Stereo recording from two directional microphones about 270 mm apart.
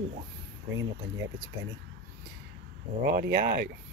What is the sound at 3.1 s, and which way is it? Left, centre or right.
Speech, right.